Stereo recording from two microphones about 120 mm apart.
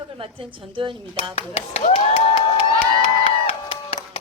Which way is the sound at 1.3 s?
55° left (ahead or behind).